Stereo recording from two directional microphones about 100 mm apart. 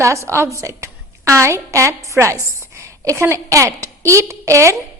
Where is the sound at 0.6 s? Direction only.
30° right (ahead or behind).